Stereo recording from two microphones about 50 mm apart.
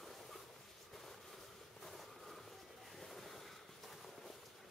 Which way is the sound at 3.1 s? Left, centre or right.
Centre.